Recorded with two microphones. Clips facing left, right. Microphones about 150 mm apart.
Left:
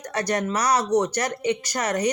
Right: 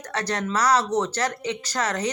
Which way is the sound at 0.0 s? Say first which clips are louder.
Left 3 dB; 15° left (ahead or behind).